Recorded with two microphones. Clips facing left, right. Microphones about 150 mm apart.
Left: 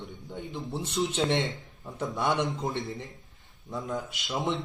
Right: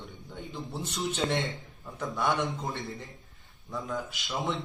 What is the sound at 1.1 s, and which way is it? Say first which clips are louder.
Speech: right 1 dB; 25° left (ahead or behind).